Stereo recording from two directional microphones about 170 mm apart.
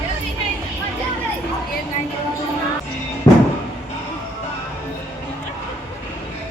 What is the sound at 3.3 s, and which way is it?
Music, 25° left (ahead or behind).